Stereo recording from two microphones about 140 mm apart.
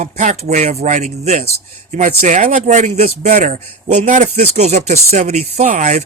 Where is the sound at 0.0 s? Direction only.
60° right (ahead or behind).